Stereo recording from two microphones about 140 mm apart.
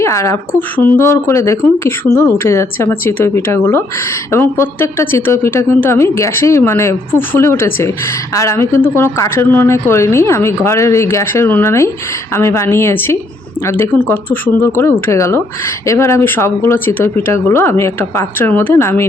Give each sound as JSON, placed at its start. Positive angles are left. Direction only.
{"t": 0.0, "sound": "a woman's voice", "side_deg": 20}
{"t": 14.6, "sound": "a woman's voice", "side_deg": 15}